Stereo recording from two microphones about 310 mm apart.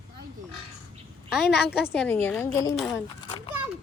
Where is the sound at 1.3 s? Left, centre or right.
Centre.